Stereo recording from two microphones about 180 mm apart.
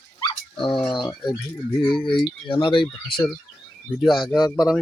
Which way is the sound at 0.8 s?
25° left (ahead or behind).